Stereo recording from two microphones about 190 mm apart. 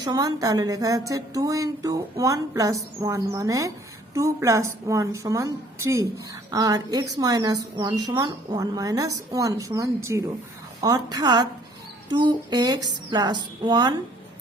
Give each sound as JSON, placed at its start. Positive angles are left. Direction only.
{"t": 0.0, "sound": "a woman's voice", "side_deg": -20}